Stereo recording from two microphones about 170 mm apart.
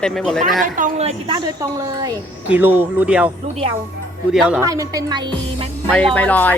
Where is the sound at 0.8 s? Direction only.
40° right (ahead or behind).